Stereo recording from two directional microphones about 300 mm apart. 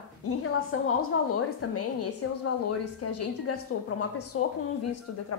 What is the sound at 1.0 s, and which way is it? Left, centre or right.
Speech, left.